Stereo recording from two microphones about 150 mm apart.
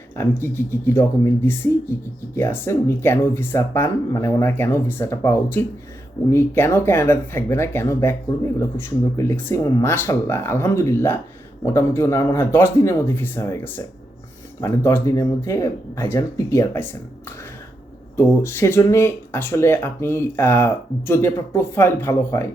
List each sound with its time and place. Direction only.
0.2 s speech: 15° left (ahead or behind)
18.2 s speech: 15° left (ahead or behind)